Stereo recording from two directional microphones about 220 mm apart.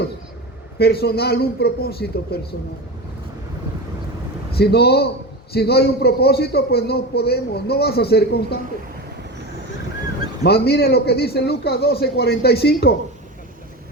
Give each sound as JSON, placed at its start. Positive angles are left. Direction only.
{"t": 0.8, "sound": "a man's voice", "side_deg": 45}
{"t": 4.5, "sound": "a man's voice", "side_deg": 45}
{"t": 10.4, "sound": "a man's voice", "side_deg": 45}